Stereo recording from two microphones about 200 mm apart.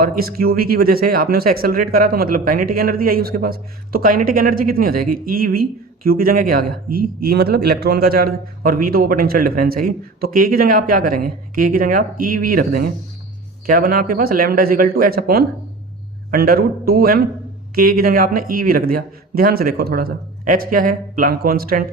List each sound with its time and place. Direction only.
0.0 s speech: 45° right (ahead or behind)